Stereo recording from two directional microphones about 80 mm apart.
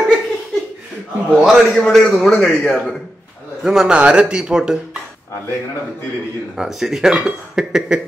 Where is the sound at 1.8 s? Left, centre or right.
Centre.